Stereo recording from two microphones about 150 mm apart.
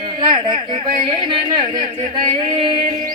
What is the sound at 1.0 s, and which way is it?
Speech, 30° right (ahead or behind).